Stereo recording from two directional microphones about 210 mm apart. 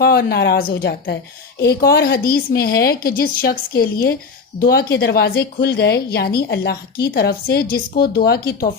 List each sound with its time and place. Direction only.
0.0 s a woman's voice: 50° left (ahead or behind)